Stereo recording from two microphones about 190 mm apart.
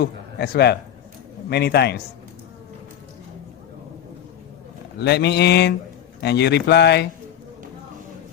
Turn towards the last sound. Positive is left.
turn(degrees=60)  # may be behind; listen again after turning